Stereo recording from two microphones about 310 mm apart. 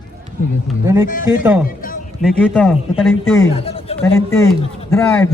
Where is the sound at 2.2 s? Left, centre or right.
Centre.